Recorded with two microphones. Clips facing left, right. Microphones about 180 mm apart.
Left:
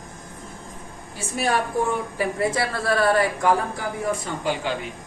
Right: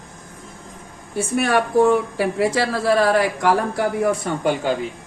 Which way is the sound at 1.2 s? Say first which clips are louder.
Right 5 dB; 60° right (ahead or behind).